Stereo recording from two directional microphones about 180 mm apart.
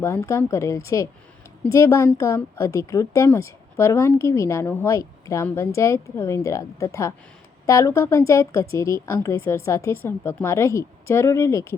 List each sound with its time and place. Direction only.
0.0 s a woman's voice: 15° left (ahead or behind)